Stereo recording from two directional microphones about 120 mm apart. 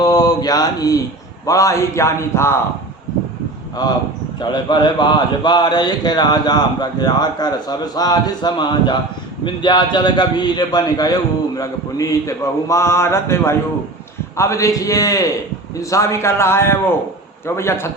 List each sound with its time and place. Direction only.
0.0 s mantra: 30° left (ahead or behind)
1.5 s a man's voice: 25° left (ahead or behind)
3.8 s a man's voice: 35° left (ahead or behind)